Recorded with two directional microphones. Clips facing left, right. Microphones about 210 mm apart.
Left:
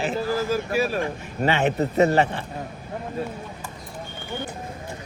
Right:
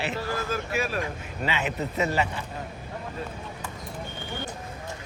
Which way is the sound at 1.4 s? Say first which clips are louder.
Left 8 dB; 50° left (ahead or behind).